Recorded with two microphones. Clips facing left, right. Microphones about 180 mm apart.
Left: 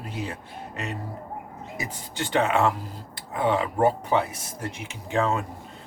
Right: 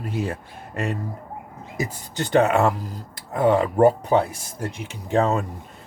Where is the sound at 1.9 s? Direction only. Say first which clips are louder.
Right 6 dB; 40° right (ahead or behind).